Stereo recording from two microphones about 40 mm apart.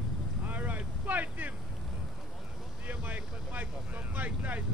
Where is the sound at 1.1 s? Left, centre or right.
Right.